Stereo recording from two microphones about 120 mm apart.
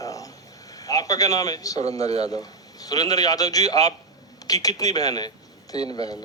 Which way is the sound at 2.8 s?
30° left (ahead or behind).